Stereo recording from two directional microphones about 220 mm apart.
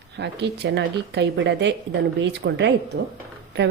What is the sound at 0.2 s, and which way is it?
Speech, 50° right (ahead or behind).